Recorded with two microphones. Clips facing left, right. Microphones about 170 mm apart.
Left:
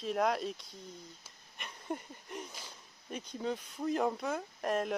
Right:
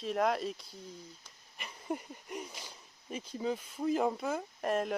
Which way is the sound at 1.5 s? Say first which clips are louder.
Right 2 dB; 5° right (ahead or behind).